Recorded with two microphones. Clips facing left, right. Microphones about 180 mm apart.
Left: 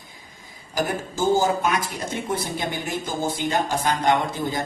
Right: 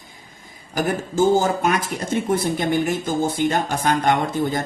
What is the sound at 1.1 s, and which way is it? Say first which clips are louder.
Speech: right 3 dB; 55° right (ahead or behind).